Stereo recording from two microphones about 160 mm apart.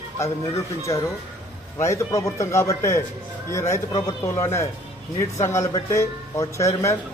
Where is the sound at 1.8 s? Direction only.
20° left (ahead or behind).